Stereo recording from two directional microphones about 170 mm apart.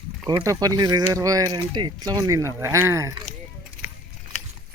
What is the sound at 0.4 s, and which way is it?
Speech, 20° right (ahead or behind).